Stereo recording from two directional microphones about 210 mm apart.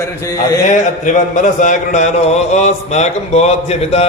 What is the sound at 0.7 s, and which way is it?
Speech, 35° left (ahead or behind).